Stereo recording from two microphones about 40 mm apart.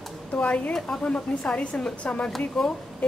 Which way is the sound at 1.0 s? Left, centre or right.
Left.